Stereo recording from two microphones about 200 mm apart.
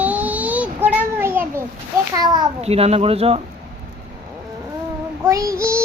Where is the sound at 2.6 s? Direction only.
30° right (ahead or behind).